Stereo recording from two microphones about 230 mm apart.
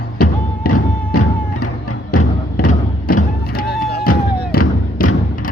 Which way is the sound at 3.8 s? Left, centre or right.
Left.